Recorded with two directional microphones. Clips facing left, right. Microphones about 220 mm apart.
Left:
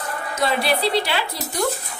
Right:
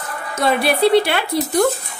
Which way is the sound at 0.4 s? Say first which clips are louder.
Right 5 dB; 55° right (ahead or behind).